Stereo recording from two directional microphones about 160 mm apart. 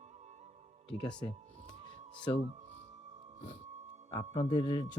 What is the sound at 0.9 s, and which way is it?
Speech, 5° left (ahead or behind).